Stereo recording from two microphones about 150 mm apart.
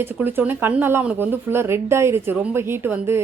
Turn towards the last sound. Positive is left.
turn(degrees=-15)  # may be behind; listen again after turning